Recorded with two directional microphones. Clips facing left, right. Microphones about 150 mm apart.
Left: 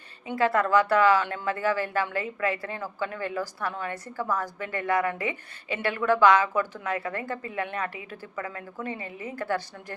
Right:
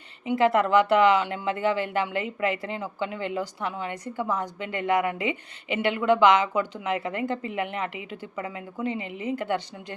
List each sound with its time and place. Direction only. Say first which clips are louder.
0.3 s speech: right 3 dB; 20° right (ahead or behind)